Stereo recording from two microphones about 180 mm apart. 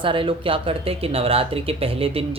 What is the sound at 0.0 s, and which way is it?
Speech, 30° right (ahead or behind).